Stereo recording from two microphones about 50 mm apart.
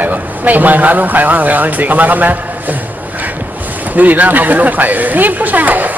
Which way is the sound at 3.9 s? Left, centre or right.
Right.